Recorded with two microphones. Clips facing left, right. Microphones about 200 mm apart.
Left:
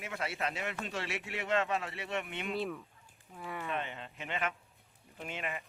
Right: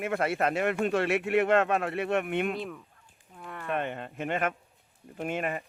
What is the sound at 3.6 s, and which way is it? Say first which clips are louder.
A man's voice: right 10 dB; 55° right (ahead or behind).